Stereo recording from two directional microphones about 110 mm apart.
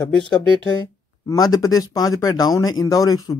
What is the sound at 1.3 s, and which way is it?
Speech, 35° left (ahead or behind).